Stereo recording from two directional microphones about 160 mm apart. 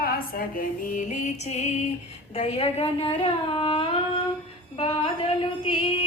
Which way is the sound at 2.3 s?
40° left (ahead or behind).